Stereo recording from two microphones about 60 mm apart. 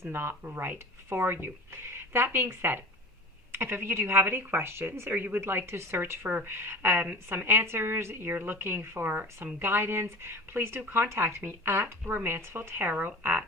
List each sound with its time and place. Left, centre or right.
0.1 s speech: right
6.2 s speech: right